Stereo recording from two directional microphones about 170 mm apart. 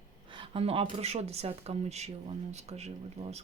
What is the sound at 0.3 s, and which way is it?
Speech, 30° right (ahead or behind).